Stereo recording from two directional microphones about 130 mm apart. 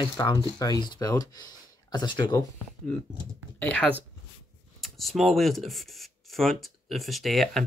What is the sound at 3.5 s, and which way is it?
Speech, 10° left (ahead or behind).